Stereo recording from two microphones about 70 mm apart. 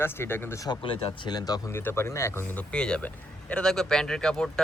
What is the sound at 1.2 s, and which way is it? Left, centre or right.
Speech, left.